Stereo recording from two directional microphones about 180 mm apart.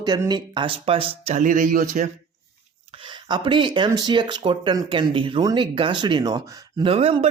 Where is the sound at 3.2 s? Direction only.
25° right (ahead or behind).